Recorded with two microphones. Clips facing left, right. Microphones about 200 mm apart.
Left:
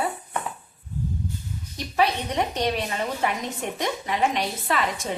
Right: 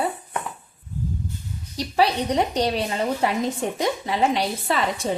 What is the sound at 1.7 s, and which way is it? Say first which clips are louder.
A woman's voice: right 3 dB; 35° right (ahead or behind).